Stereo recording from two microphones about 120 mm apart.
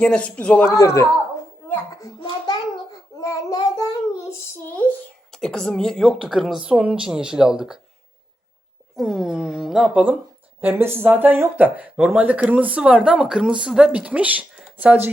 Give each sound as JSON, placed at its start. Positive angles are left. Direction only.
{"t": 0.0, "sound": "a man's voice", "side_deg": 10}
{"t": 0.8, "sound": "a woman's voice", "side_deg": 25}
{"t": 3.2, "sound": "child singing", "side_deg": 30}
{"t": 5.3, "sound": "speech", "side_deg": 5}
{"t": 9.0, "sound": "a sound", "side_deg": 0}
{"t": 10.6, "sound": "speech", "side_deg": -20}